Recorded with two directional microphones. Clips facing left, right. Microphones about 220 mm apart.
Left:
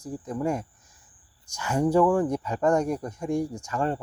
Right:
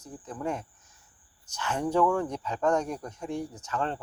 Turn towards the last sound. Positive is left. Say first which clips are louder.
# left 4 dB
turn(degrees=10)  # may be behind; listen again after turning